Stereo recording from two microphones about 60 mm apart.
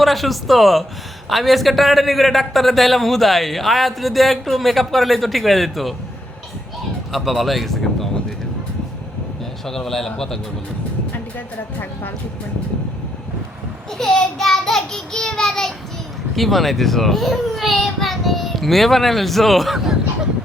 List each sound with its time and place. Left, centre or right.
0.0 s a man's voice: centre
7.1 s speech: centre
9.6 s a man's voice: centre
10.2 s child singing: centre
11.1 s speech: left
14.0 s child singing: centre
16.3 s a man's voice: centre